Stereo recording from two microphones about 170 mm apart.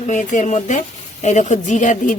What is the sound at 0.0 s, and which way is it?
A woman's voice, 45° left (ahead or behind).